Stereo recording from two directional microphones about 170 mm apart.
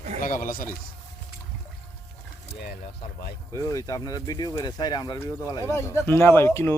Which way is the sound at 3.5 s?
20° left (ahead or behind).